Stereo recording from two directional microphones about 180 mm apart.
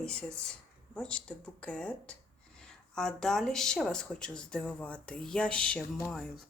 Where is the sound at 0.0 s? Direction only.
5° left (ahead or behind).